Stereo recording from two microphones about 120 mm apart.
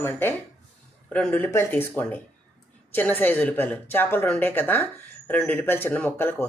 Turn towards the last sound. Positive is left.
turn(degrees=15)  # may be behind; listen again after turning